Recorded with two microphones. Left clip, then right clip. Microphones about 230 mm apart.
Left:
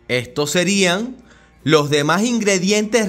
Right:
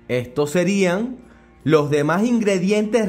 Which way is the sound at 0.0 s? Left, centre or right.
Centre.